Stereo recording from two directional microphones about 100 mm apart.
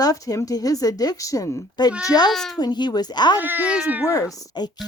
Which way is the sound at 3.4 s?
20° right (ahead or behind).